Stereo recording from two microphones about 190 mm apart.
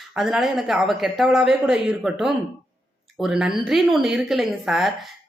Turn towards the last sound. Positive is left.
turn(degrees=0)  # may be behind; listen again after turning